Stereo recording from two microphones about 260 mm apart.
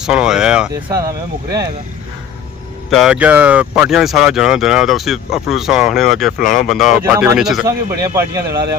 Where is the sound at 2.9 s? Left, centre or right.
Centre.